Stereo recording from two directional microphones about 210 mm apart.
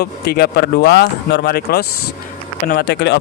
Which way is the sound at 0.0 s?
50° left (ahead or behind).